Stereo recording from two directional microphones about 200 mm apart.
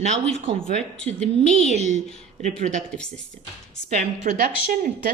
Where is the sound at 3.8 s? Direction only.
35° right (ahead or behind).